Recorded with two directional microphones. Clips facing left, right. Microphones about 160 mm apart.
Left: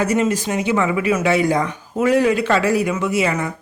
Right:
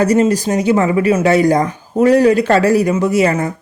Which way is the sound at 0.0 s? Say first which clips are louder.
Right 6 dB; 35° right (ahead or behind).